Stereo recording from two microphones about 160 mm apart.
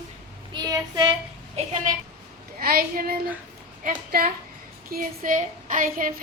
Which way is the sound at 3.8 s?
60° right (ahead or behind).